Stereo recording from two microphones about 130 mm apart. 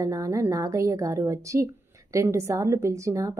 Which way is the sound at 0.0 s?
25° right (ahead or behind).